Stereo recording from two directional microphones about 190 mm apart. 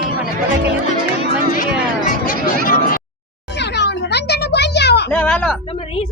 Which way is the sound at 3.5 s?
60° left (ahead or behind).